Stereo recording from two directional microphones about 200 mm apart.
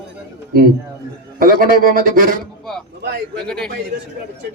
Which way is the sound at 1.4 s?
45° right (ahead or behind).